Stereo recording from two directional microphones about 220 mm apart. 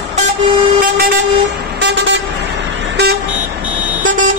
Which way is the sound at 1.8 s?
50° right (ahead or behind).